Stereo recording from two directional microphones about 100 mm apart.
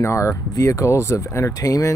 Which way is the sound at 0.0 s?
30° left (ahead or behind).